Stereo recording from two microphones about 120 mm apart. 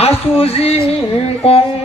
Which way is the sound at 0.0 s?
55° left (ahead or behind).